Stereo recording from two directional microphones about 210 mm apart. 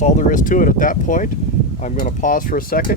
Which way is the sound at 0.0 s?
35° left (ahead or behind).